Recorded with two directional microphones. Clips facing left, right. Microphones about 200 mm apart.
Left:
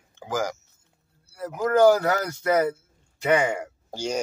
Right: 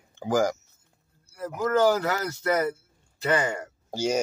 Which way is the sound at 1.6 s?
10° left (ahead or behind).